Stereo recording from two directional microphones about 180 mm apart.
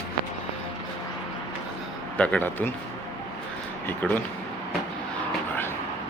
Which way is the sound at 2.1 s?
5° left (ahead or behind).